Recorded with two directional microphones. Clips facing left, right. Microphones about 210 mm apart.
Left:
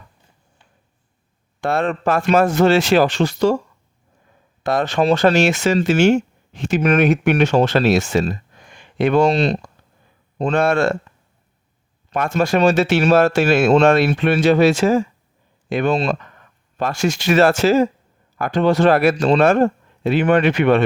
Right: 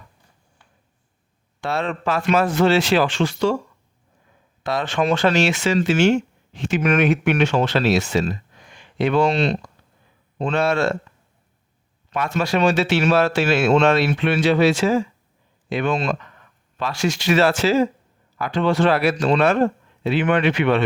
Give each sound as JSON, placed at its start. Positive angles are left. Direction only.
{"t": 1.6, "sound": "speech", "side_deg": 50}
{"t": 4.6, "sound": "speech", "side_deg": 45}
{"t": 12.1, "sound": "speech", "side_deg": 45}
{"t": 16.7, "sound": "speech", "side_deg": 45}